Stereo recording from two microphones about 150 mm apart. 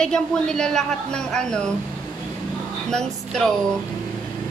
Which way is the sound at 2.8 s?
5° left (ahead or behind).